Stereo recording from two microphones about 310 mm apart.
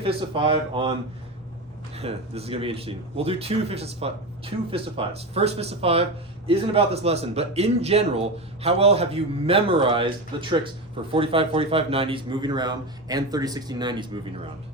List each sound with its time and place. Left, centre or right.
0.0 s a man's voice: centre
2.0 s a man's voice: centre